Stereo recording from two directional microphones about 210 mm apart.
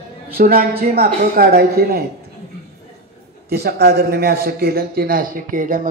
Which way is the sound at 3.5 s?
50° right (ahead or behind).